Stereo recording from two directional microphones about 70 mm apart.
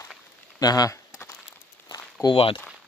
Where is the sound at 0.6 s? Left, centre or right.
Left.